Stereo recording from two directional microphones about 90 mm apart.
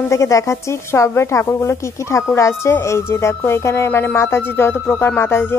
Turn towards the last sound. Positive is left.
turn(degrees=25)  # may be behind; listen again after turning